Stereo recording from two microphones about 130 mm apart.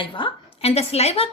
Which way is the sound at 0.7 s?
55° left (ahead or behind).